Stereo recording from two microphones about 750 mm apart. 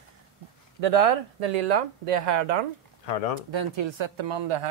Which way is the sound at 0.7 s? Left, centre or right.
Right.